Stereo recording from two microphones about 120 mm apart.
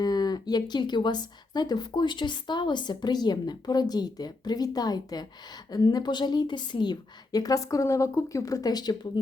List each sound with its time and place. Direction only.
0.0 s speech: 35° left (ahead or behind)